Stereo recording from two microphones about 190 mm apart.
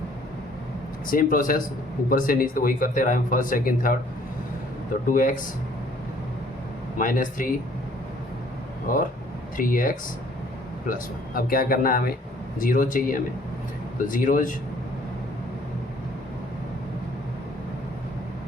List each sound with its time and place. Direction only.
1.0 s speech: 45° left (ahead or behind)
5.0 s speech: 45° left (ahead or behind)
7.0 s speech: 45° left (ahead or behind)
8.9 s speech: 45° left (ahead or behind)